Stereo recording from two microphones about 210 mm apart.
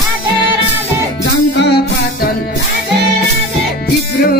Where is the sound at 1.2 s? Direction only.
55° left (ahead or behind).